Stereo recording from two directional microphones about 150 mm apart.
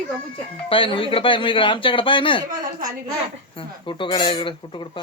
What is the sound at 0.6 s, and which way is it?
Speech, 35° left (ahead or behind).